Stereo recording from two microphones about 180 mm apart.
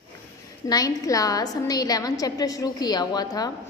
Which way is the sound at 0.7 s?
20° left (ahead or behind).